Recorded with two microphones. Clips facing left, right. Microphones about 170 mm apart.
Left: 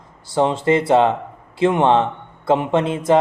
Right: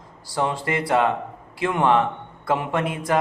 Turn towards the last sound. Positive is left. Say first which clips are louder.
# left 7 dB
turn(degrees=25)  # may be behind; listen again after turning